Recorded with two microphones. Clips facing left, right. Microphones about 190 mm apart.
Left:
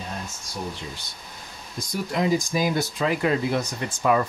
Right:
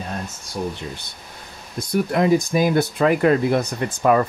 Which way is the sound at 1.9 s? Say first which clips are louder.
Right 6 dB; 60° right (ahead or behind).